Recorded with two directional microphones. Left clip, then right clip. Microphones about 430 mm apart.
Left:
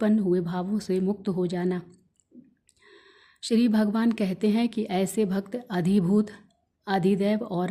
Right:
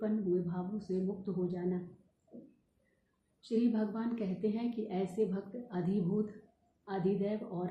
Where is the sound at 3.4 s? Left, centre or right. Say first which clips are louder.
Left 9 dB; left.